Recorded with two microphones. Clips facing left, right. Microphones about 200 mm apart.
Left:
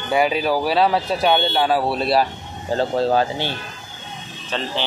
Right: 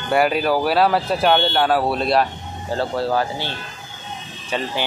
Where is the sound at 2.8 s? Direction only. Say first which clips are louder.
Left 3 dB; 20° left (ahead or behind).